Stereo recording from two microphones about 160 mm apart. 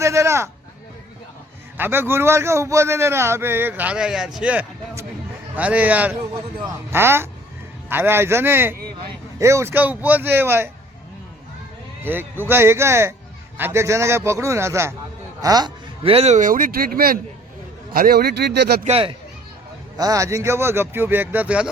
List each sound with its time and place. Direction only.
0.0 s a sound: 20° right (ahead or behind)
1.8 s a man's voice: 15° right (ahead or behind)
12.0 s a man's voice: 15° right (ahead or behind); by 18.8 s 90° right
18.9 s speech: 35° right (ahead or behind)
20.0 s a man's voice: 20° right (ahead or behind)